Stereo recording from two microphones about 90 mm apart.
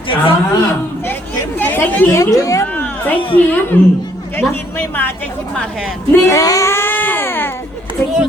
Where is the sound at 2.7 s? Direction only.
20° left (ahead or behind).